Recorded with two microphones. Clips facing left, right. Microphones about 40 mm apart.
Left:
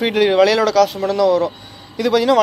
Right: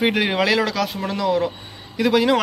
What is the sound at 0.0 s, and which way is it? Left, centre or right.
Speech, centre.